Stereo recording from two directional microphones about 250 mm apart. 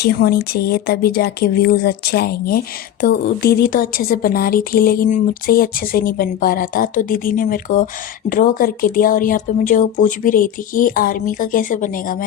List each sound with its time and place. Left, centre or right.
0.0 s speech: left